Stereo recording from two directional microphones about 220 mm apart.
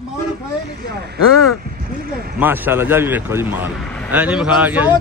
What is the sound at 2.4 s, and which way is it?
A man's voice, 10° right (ahead or behind).